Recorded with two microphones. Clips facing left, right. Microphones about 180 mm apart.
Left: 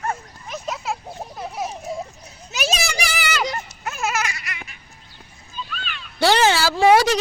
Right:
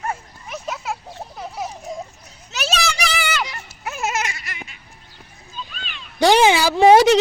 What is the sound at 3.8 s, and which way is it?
Babbling, 20° right (ahead or behind).